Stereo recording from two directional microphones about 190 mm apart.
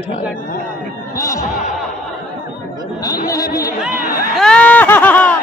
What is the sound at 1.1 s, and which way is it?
Speech, 15° left (ahead or behind).